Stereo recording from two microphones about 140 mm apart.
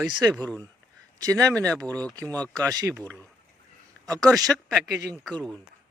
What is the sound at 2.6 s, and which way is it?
Speech, 25° right (ahead or behind).